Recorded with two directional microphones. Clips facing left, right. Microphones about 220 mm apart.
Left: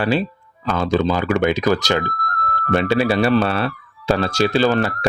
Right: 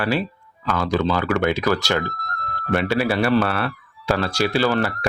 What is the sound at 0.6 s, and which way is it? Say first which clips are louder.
Speech: left 3 dB; 25° left (ahead or behind).